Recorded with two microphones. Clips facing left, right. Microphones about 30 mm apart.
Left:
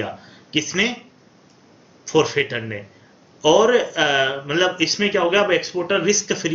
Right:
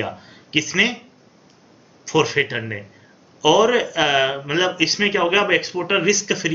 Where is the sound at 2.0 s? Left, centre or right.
Centre.